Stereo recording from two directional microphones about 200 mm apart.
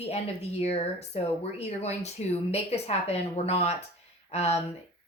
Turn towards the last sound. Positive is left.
turn(degrees=30)  # may be behind; listen again after turning